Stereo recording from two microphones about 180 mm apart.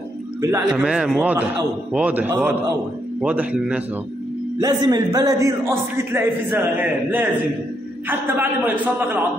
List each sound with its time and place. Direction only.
0.4 s a man's voice: 15° right (ahead or behind)
0.8 s a man's voice: 5° right (ahead or behind)
4.6 s a man's voice: 20° right (ahead or behind)